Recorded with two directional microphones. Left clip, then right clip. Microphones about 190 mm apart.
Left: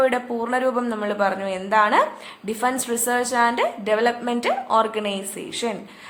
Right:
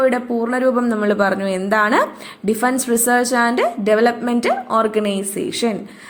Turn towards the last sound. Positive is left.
turn(degrees=-15)  # may be behind; listen again after turning